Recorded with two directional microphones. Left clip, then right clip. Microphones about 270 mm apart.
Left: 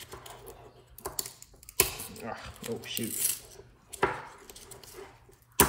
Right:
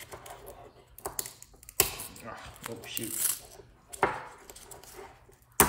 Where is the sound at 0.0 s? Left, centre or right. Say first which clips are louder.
Right 1 dB; centre.